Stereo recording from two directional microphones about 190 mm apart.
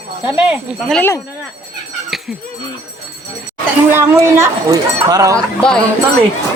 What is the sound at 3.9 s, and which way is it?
Speech, 15° right (ahead or behind).